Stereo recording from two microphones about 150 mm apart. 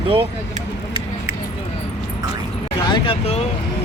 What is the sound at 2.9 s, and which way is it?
Speech, 40° left (ahead or behind).